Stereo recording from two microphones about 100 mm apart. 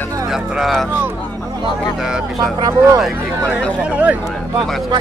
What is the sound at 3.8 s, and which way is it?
Speech, 15° right (ahead or behind).